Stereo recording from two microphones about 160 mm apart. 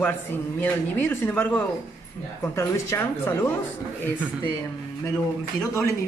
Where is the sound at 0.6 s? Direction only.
15° left (ahead or behind).